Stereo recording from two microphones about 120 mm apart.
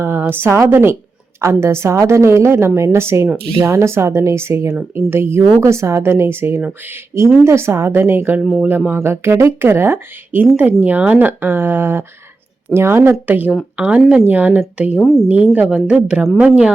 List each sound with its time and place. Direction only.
0.0 s a woman's voice: 15° right (ahead or behind)
15.0 s speech: 5° left (ahead or behind)